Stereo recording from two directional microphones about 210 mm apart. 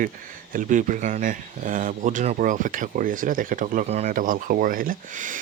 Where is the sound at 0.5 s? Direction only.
40° right (ahead or behind).